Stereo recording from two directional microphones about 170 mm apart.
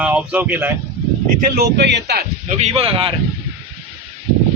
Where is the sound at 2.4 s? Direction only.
40° right (ahead or behind).